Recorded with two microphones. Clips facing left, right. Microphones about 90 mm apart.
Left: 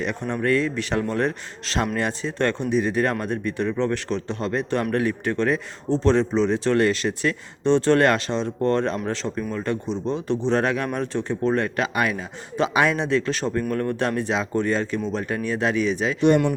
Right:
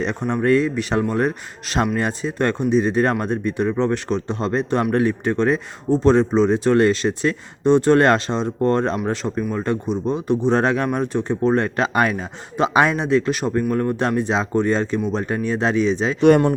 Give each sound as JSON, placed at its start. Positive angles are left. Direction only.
{"t": 0.0, "sound": "speech", "side_deg": -20}